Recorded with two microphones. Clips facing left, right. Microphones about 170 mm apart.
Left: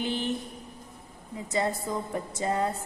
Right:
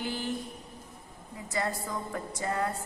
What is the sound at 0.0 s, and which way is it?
Mantra, 20° left (ahead or behind).